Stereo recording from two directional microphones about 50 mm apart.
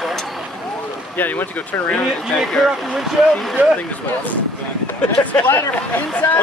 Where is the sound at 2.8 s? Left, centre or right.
Centre.